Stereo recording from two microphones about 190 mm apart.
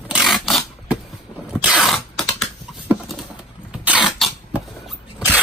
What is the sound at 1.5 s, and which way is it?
Sneeze, 5° right (ahead or behind).